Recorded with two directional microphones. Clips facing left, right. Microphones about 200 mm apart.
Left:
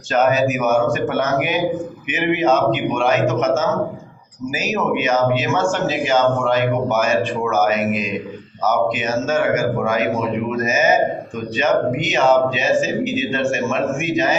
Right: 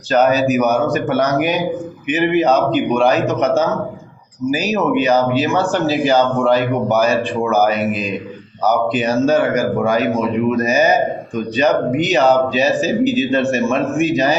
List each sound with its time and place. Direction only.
0.1 s speech: 35° right (ahead or behind)